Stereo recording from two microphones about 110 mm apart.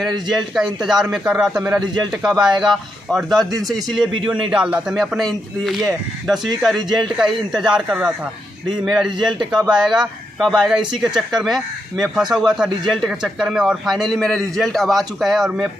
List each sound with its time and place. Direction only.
0.0 s a man's voice: centre (ahead or behind)